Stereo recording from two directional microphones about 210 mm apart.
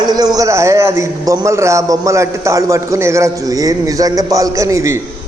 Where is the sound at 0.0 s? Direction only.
20° right (ahead or behind).